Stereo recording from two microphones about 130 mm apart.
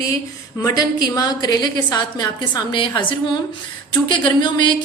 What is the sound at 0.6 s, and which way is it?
Speech, 30° left (ahead or behind).